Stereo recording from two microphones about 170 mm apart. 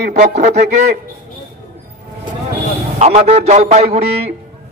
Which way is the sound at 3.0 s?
40° right (ahead or behind).